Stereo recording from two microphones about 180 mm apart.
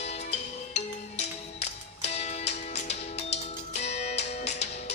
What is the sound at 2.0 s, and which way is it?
Music, 40° left (ahead or behind).